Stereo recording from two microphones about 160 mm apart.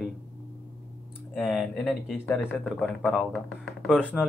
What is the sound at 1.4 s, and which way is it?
Speech, 5° left (ahead or behind).